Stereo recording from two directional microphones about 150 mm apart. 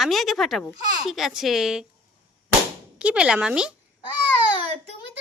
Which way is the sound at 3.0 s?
5° right (ahead or behind).